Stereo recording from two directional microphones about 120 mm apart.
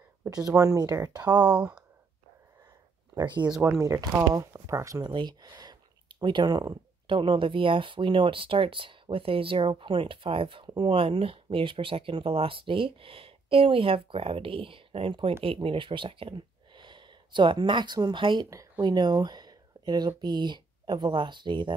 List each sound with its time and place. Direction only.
0.6 s speech: 30° right (ahead or behind)
1.6 s speech: 10° right (ahead or behind)
3.2 s speech: 40° right (ahead or behind)
3.6 s speech: 25° right (ahead or behind)
5.1 s speech: 35° right (ahead or behind)
7.2 s speech: 45° right (ahead or behind)